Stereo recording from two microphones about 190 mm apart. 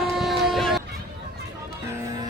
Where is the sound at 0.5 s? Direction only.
Centre (ahead or behind).